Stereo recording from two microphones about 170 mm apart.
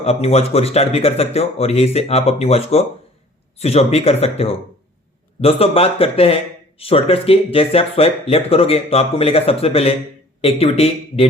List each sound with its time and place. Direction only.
0.0 s speech: 35° left (ahead or behind)